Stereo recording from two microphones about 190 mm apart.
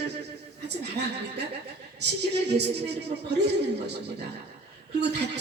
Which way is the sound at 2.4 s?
60° right (ahead or behind).